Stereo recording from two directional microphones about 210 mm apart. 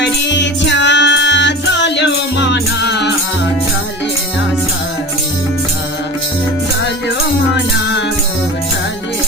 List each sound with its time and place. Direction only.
0.0 s music: 55° left (ahead or behind)